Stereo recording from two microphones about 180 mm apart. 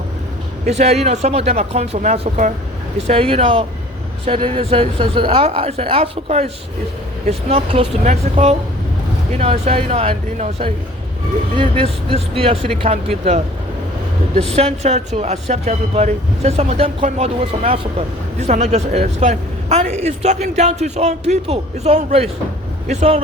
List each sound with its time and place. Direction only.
0.7 s speech: 35° right (ahead or behind)
14.5 s speech: 35° right (ahead or behind)